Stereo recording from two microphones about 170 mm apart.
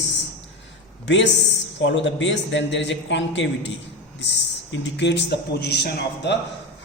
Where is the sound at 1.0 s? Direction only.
90° left.